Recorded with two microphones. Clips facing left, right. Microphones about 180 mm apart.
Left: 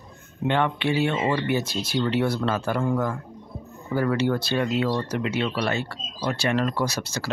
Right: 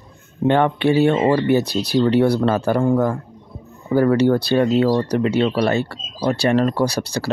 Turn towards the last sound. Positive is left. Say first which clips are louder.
# right 7 dB
turn(degrees=-35)  # may be behind; listen again after turning